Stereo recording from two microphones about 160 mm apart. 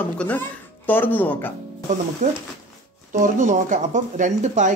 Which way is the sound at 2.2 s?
50° right (ahead or behind).